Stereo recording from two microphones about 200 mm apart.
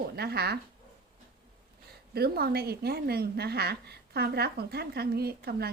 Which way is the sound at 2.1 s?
50° right (ahead or behind).